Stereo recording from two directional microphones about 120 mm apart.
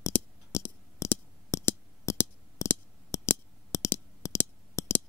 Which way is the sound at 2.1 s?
25° left (ahead or behind).